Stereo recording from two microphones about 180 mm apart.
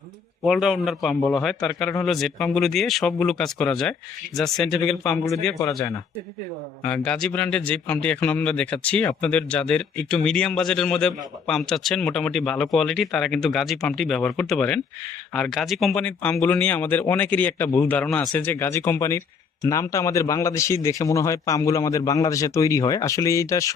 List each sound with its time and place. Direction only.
0.4 s a man's voice: centre (ahead or behind)
5.5 s a man's voice: 15° left (ahead or behind)
6.8 s a man's voice: 5° left (ahead or behind)